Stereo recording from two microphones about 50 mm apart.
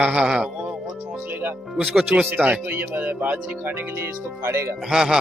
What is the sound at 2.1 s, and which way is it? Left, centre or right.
Speech, right.